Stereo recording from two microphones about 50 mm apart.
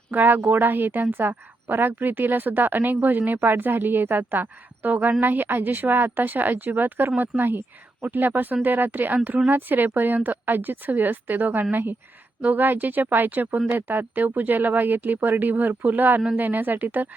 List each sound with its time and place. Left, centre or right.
0.1 s a woman's voice: right